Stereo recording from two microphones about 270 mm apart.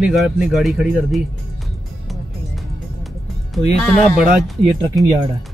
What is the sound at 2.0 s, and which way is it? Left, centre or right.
Music, centre.